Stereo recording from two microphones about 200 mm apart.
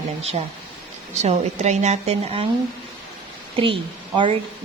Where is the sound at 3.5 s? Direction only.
25° right (ahead or behind).